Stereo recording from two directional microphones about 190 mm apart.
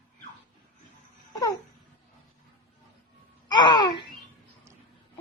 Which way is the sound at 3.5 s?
20° left (ahead or behind).